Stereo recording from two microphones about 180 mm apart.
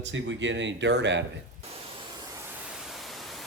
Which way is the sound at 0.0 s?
90° right.